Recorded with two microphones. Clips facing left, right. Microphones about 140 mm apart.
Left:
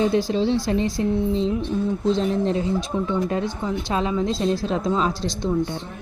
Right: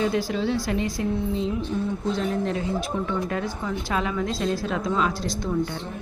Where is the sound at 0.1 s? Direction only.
25° left (ahead or behind).